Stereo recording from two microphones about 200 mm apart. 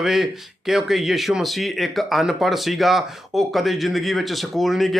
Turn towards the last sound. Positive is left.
turn(degrees=0)  # may be behind; listen again after turning